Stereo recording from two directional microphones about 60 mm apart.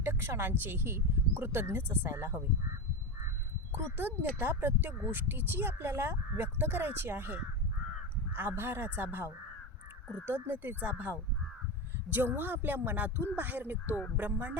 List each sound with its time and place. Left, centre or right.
0.0 s speech: right
3.7 s speech: right
8.4 s speech: right
10.2 s speech: right